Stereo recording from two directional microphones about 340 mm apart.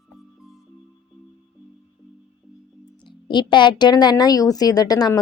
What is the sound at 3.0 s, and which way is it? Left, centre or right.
Speech, centre.